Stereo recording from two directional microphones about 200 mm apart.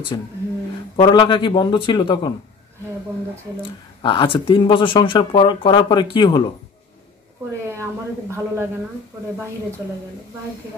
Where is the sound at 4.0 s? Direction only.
25° left (ahead or behind).